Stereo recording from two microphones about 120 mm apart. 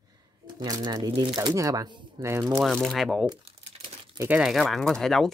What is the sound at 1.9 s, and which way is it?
Speech, 40° right (ahead or behind).